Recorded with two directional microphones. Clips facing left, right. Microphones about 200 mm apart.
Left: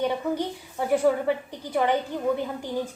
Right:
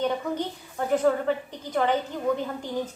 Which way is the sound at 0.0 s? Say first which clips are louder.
Left 1 dB; 10° left (ahead or behind).